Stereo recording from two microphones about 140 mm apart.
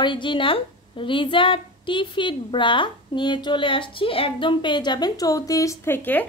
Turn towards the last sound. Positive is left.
turn(degrees=15)  # may be behind; listen again after turning